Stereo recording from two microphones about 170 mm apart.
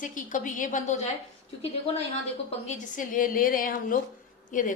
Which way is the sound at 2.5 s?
45° left (ahead or behind).